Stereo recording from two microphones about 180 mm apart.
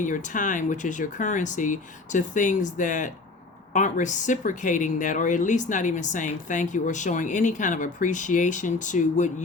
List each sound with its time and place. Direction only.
0.0 s speech: 45° left (ahead or behind)